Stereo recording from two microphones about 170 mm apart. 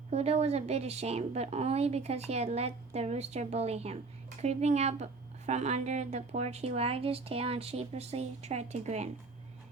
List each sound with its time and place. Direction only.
0.1 s a woman's voice: 40° right (ahead or behind)